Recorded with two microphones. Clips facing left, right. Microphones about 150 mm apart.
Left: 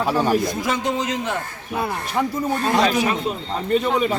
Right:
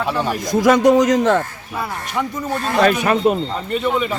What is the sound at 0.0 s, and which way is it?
Speech, 40° left (ahead or behind).